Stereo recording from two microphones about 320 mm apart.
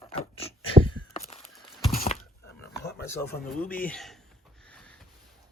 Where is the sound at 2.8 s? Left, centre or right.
Centre.